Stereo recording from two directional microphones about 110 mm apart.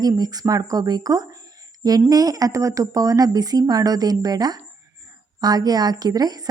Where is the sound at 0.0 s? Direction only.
35° right (ahead or behind).